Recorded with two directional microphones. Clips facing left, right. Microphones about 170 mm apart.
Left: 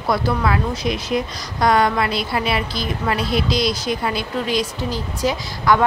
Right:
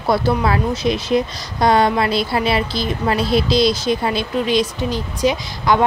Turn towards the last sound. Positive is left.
turn(degrees=-20)  # may be behind; listen again after turning